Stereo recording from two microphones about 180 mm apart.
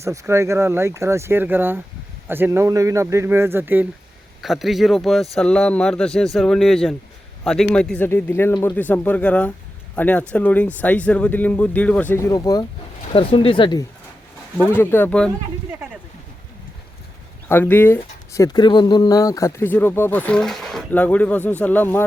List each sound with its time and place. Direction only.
0.0 s a man's voice: 15° right (ahead or behind); by 12.2 s 10° left (ahead or behind)
12.3 s speech: 20° left (ahead or behind)
14.7 s speech: 10° left (ahead or behind)
17.5 s speech: 10° left (ahead or behind)